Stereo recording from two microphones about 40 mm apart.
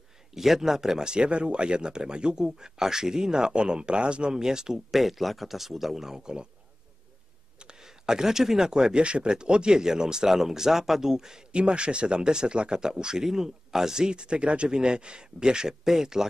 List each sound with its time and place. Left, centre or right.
0.3 s speech: centre
4.9 s a man's voice: centre
7.5 s speech: centre